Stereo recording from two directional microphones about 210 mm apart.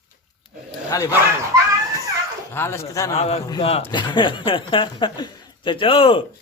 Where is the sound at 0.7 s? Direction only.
15° left (ahead or behind).